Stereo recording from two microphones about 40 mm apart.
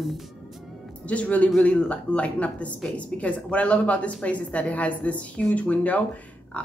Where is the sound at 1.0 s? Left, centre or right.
Left.